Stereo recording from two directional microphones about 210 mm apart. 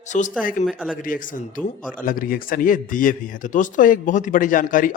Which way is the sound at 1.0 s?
40° left (ahead or behind).